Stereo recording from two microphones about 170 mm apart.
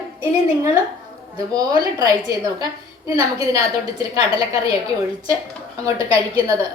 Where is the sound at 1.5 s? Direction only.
20° right (ahead or behind).